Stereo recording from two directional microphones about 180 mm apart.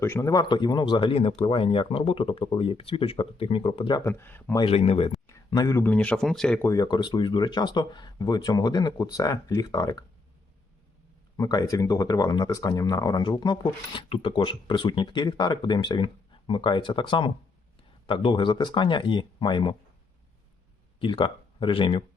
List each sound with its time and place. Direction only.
0.0 s speech: 15° left (ahead or behind)
4.0 s speech: 10° left (ahead or behind)
4.6 s speech: 35° left (ahead or behind)
5.5 s speech: 20° left (ahead or behind)
5.9 s speech: 5° left (ahead or behind)
6.7 s speech: 20° left (ahead or behind)
11.3 s speech: 20° left (ahead or behind)
21.0 s speech: 30° left (ahead or behind)